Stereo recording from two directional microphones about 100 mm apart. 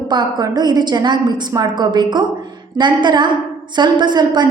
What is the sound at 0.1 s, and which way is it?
A woman's voice, 45° right (ahead or behind).